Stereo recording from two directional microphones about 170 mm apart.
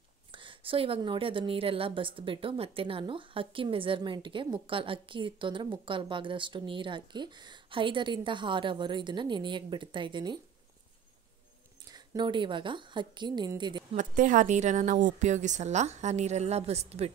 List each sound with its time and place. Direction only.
0.3 s a woman's voice: 30° right (ahead or behind)
11.9 s a woman's voice: 25° right (ahead or behind)
13.9 s a woman's voice: 50° right (ahead or behind)